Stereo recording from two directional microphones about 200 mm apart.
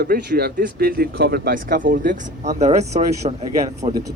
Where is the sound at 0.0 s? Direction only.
50° right (ahead or behind).